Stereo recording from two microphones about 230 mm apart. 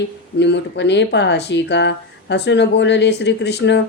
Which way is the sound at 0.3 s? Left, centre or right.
Left.